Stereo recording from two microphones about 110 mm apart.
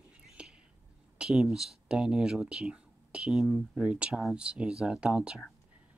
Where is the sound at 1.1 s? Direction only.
5° right (ahead or behind).